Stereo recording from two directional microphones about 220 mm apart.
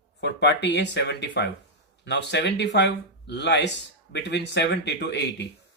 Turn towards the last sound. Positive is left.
turn(degrees=50)  # may be behind; listen again after turning